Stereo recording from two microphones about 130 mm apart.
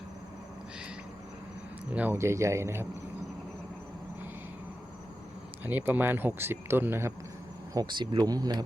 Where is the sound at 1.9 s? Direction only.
15° right (ahead or behind).